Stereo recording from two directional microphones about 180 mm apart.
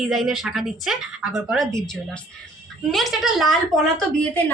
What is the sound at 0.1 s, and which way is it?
A woman's voice, centre (ahead or behind).